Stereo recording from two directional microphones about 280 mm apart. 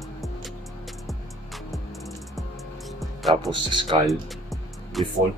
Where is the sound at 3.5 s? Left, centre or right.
Centre.